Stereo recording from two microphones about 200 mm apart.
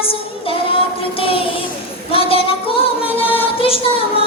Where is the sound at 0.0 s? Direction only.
25° left (ahead or behind).